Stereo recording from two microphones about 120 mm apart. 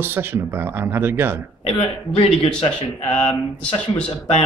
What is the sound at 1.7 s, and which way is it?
A man's voice, 60° left (ahead or behind).